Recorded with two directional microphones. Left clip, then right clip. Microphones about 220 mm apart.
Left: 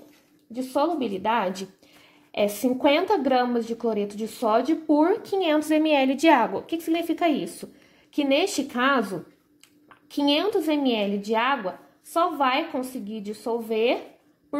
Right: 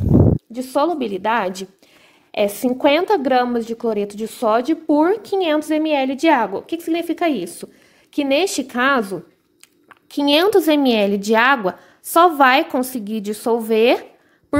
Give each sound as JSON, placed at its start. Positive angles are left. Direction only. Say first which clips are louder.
{"t": 0.5, "sound": "a woman's voice", "louder": "right 6 dB", "side_deg": -35}